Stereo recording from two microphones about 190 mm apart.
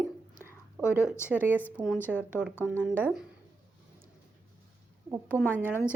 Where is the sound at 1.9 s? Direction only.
10° left (ahead or behind).